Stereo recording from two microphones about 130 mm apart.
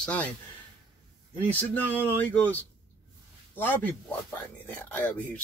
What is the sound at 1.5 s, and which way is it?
Speech, 15° left (ahead or behind).